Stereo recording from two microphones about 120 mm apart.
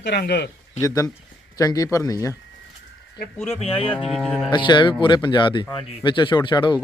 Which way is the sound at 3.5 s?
55° left (ahead or behind).